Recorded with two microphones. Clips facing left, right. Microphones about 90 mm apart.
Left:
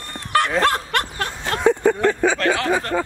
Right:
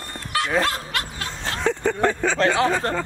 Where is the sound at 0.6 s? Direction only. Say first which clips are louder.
Left 5 dB; 55° left (ahead or behind).